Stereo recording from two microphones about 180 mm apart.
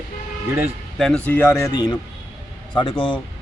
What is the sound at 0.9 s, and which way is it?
A man's voice, centre (ahead or behind).